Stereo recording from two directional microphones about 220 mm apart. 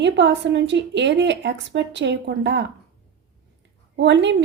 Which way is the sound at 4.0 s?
55° right (ahead or behind).